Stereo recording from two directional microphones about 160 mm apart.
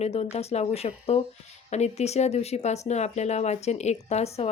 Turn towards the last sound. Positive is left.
turn(degrees=40)  # may be behind; listen again after turning